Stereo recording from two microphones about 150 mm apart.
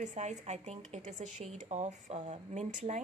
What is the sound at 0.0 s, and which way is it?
A woman's voice, 50° right (ahead or behind).